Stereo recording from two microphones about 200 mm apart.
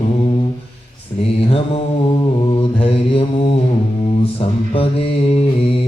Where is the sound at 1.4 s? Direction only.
30° left (ahead or behind).